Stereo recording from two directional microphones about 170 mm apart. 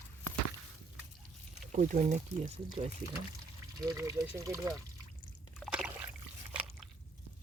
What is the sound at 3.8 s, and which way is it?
Speech, 20° right (ahead or behind).